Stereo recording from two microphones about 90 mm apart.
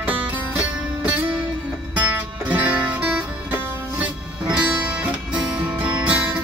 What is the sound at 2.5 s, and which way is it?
Music, 15° right (ahead or behind).